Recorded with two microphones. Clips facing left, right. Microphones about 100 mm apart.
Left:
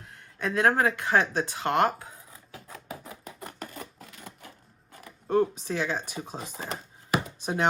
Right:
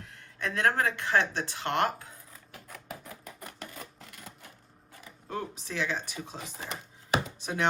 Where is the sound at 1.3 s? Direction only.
45° left (ahead or behind).